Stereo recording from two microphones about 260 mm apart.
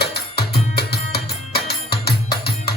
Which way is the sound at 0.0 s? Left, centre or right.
Left.